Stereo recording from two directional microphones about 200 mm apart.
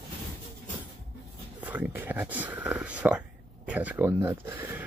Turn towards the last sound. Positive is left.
turn(degrees=-10)  # may be behind; listen again after turning